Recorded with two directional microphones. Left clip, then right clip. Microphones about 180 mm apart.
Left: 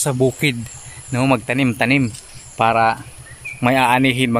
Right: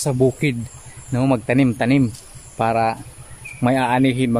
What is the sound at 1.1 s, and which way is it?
Speech, 5° right (ahead or behind).